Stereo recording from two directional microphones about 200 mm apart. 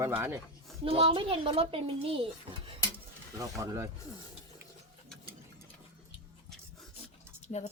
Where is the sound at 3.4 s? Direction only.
15° right (ahead or behind).